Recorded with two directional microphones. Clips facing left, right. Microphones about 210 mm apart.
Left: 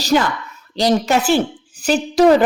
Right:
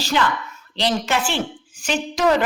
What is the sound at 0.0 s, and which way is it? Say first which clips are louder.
Speech: left 5 dB; 40° left (ahead or behind).